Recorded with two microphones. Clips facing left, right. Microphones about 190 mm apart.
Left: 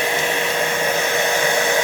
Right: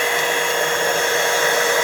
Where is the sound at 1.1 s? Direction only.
20° left (ahead or behind).